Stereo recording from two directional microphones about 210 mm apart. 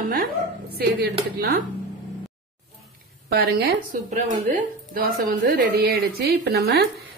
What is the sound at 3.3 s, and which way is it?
A woman's voice, 45° right (ahead or behind).